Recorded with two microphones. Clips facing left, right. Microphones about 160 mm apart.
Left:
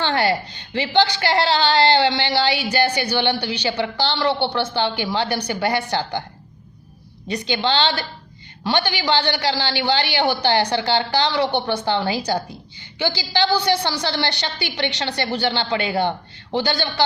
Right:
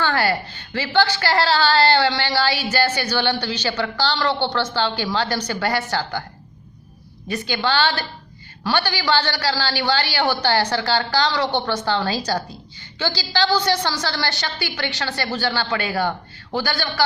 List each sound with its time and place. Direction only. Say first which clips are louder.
0.0 s a woman's voice: left 1 dB; 20° left (ahead or behind)
7.3 s a woman's voice: left 1 dB; 20° left (ahead or behind)